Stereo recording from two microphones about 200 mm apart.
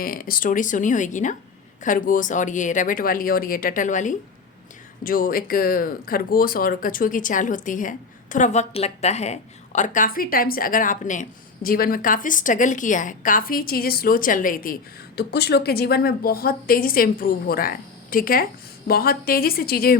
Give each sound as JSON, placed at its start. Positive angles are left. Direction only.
{"t": 0.0, "sound": "speech", "side_deg": 45}